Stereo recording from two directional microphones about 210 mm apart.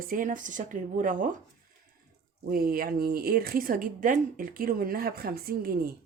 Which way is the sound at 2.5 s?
45° right (ahead or behind).